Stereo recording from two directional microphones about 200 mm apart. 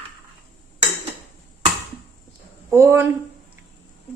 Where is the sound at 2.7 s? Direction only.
10° right (ahead or behind).